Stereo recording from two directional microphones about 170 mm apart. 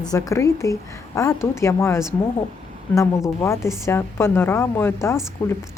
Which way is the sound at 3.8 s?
15° left (ahead or behind).